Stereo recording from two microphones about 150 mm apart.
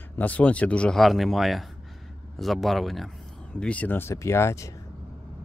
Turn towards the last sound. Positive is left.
turn(degrees=20)  # may be behind; listen again after turning